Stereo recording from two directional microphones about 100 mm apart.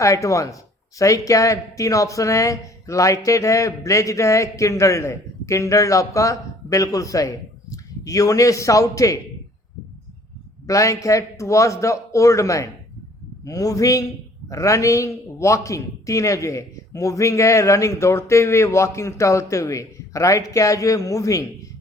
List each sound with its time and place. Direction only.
0.0 s speech: 30° left (ahead or behind)
10.7 s speech: 35° left (ahead or behind)